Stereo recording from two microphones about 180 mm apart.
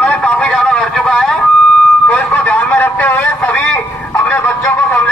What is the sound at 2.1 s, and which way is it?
Vehicle, 10° left (ahead or behind).